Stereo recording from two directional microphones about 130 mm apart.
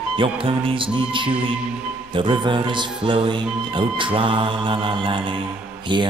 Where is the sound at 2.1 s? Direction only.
35° right (ahead or behind).